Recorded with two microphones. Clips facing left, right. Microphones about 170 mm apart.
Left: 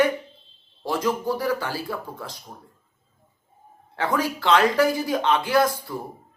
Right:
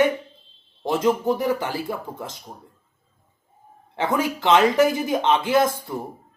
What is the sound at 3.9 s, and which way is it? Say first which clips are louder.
Speech: right 2 dB; 20° right (ahead or behind).